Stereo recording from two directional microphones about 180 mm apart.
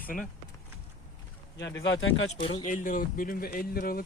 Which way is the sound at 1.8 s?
90° left.